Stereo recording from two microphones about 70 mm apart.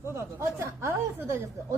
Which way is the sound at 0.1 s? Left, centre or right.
Right.